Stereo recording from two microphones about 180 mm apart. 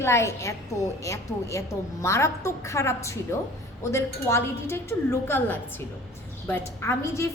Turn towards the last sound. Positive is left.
turn(degrees=15)  # may be behind; listen again after turning